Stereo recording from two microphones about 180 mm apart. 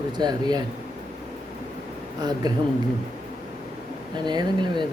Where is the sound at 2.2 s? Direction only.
20° right (ahead or behind).